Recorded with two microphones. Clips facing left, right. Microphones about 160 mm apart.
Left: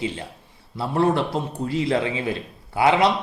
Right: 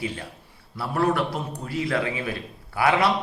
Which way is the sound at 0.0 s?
20° left (ahead or behind).